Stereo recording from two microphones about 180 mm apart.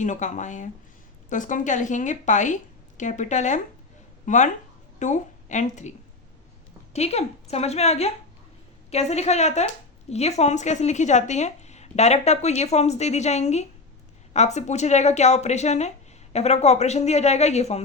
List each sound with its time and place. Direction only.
0.0 s a woman's voice: 40° left (ahead or behind)
6.9 s a woman's voice: 35° left (ahead or behind)